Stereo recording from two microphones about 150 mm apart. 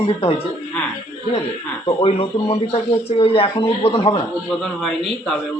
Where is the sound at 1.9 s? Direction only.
35° left (ahead or behind).